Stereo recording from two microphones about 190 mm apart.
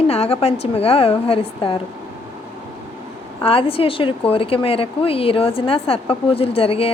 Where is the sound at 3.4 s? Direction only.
30° left (ahead or behind).